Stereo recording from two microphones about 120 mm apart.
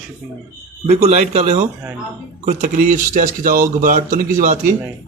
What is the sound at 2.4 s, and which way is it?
Speech, 90° right.